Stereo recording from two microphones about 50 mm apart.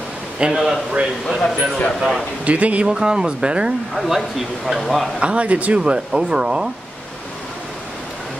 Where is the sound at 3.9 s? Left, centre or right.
Centre.